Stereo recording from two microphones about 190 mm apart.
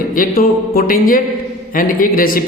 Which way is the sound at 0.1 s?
50° left (ahead or behind).